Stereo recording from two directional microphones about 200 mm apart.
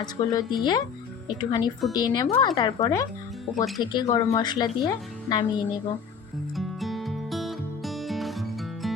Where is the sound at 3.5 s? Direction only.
Centre (ahead or behind).